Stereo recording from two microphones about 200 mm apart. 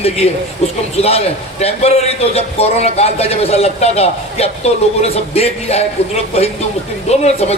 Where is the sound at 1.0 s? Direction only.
30° left (ahead or behind).